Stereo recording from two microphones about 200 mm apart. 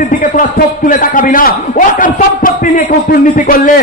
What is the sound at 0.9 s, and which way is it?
A man's voice, 40° left (ahead or behind).